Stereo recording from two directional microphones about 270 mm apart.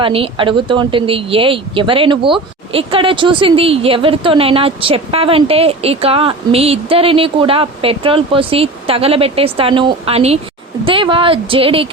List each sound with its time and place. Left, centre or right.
0.0 s speech: centre